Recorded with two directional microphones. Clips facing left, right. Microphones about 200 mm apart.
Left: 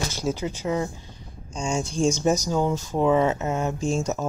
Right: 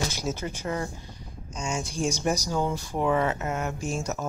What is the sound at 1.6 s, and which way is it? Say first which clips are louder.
Speech: left 5 dB; 30° left (ahead or behind).